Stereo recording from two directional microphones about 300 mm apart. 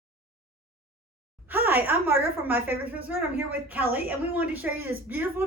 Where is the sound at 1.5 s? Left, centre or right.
Centre.